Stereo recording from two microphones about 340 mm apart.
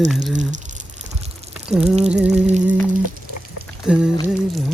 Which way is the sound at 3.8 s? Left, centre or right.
Centre.